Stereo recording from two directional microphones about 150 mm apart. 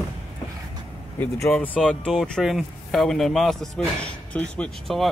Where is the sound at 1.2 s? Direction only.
10° left (ahead or behind).